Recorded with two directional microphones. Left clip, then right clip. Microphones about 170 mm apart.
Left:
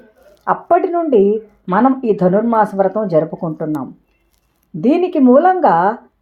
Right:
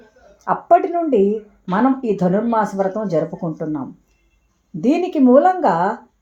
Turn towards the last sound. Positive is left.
turn(degrees=15)  # may be behind; listen again after turning